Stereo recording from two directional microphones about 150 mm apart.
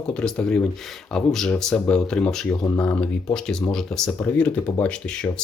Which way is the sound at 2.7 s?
25° left (ahead or behind).